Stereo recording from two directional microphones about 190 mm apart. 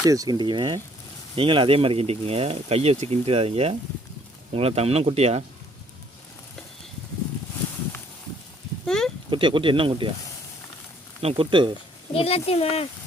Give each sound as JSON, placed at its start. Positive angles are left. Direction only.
{"t": 0.0, "sound": "speech", "side_deg": -20}
{"t": 8.9, "sound": "a sound", "side_deg": 0}
{"t": 9.3, "sound": "speech", "side_deg": -25}
{"t": 11.2, "sound": "speech", "side_deg": -30}
{"t": 12.1, "sound": "speech", "side_deg": 30}